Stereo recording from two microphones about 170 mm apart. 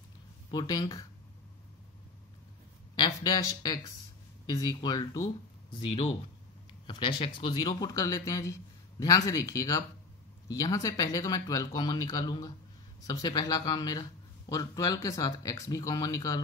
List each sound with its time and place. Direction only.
0.5 s a man's voice: 25° left (ahead or behind)
3.0 s a man's voice: 25° left (ahead or behind)
5.8 s a man's voice: 35° left (ahead or behind)